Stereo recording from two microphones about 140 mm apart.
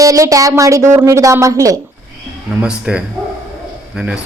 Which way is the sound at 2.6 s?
5° right (ahead or behind).